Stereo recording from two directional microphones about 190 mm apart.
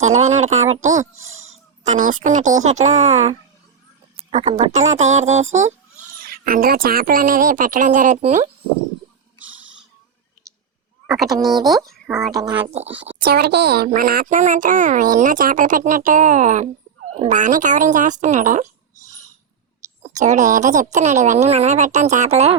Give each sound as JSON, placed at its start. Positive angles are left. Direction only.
{"t": 0.2, "sound": "speech", "side_deg": -35}
{"t": 6.1, "sound": "speech", "side_deg": -50}
{"t": 11.0, "sound": "speech", "side_deg": 0}
{"t": 12.6, "sound": "speech", "side_deg": -35}
{"t": 13.2, "sound": "speech", "side_deg": -55}